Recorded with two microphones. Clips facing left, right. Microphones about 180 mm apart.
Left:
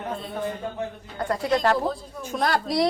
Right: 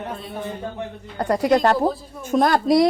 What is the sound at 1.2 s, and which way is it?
A woman's voice, 40° right (ahead or behind).